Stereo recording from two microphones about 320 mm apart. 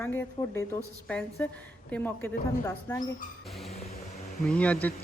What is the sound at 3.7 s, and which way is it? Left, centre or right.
Vehicle, centre.